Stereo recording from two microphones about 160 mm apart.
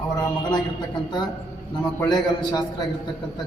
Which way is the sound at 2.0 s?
25° left (ahead or behind).